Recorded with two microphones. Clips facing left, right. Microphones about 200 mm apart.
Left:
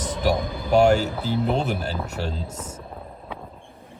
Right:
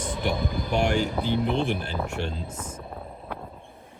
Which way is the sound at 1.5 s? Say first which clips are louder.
Left 2 dB; 45° left (ahead or behind).